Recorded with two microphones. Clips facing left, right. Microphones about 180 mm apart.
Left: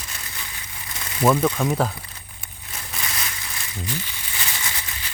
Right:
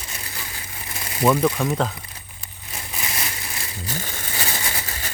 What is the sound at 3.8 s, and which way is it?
Crumpling, 45° right (ahead or behind).